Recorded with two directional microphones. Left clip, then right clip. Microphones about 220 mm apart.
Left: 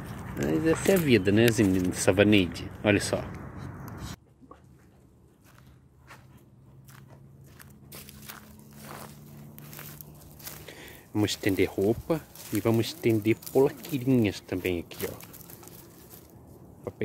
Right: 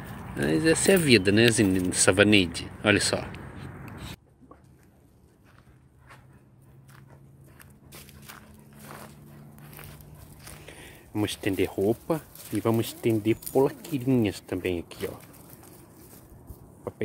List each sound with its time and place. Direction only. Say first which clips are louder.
0.4 s speech: right 3 dB; 20° right (ahead or behind)
1.1 s speech: right 2 dB; 10° right (ahead or behind)
3.5 s a sound: even; 20° left (ahead or behind)
7.5 s walk: left 1 dB; 5° left (ahead or behind)
8.8 s vehicle: left 1 dB; 5° right (ahead or behind)
9.7 s a sound: left 1 dB; centre (ahead or behind); by 12.4 s 15° right (ahead or behind)
12.6 s speech: even; 15° right (ahead or behind)